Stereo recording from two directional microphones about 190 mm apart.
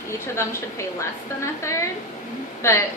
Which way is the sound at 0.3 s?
15° left (ahead or behind).